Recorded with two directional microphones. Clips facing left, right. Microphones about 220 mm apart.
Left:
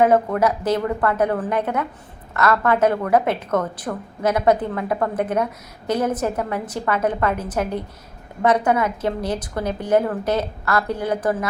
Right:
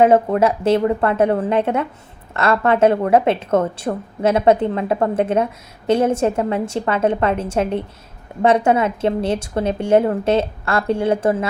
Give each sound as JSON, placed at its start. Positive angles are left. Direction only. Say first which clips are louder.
{"t": 0.0, "sound": "a woman's voice", "louder": "right 3 dB", "side_deg": -25}